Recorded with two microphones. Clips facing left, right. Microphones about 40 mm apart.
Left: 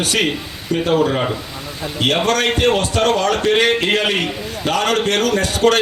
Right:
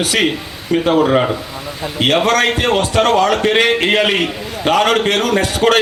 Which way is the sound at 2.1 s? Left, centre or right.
Centre.